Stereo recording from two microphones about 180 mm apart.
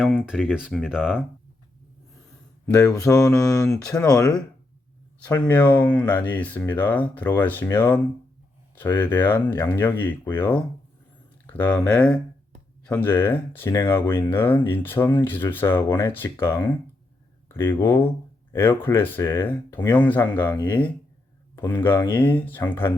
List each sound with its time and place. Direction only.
0.0 s speech: 5° right (ahead or behind)
3.1 s speech: 10° left (ahead or behind)
4.0 s speech: 20° left (ahead or behind)
5.2 s speech: 10° left (ahead or behind)